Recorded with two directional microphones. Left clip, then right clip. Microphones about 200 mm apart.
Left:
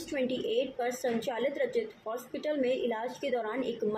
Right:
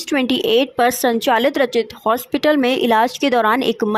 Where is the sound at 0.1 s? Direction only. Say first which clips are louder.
Right 15 dB; 60° right (ahead or behind).